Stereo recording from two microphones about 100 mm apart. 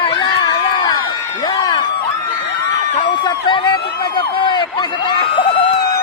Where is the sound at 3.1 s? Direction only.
55° left (ahead or behind).